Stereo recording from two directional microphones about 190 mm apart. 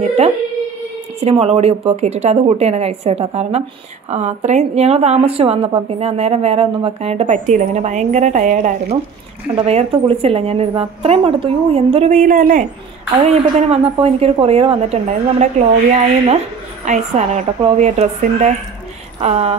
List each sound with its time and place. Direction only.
1.2 s a woman's voice: 35° right (ahead or behind)